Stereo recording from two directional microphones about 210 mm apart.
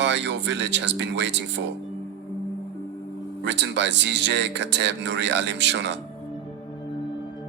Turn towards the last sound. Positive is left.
turn(degrees=-55)  # may be behind; listen again after turning